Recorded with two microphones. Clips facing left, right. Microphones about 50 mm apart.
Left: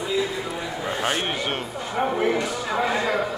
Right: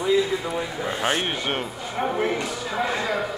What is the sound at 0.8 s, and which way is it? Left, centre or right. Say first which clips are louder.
Speech: even; centre.